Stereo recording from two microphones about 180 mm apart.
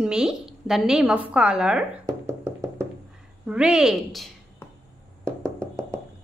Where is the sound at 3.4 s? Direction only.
5° right (ahead or behind).